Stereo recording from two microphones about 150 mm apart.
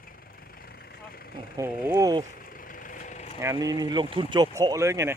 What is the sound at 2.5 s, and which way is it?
Vehicle, 65° left (ahead or behind).